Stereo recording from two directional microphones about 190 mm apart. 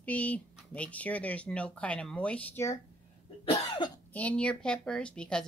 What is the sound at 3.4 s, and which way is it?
Cough, 25° left (ahead or behind).